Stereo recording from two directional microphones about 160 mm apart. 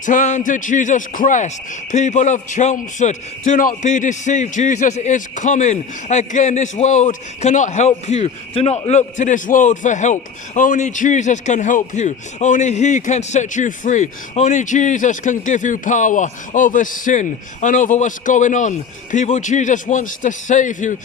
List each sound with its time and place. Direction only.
0.0 s a man's voice: 50° left (ahead or behind)